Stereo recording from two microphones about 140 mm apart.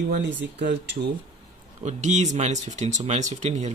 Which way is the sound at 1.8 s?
60° right (ahead or behind).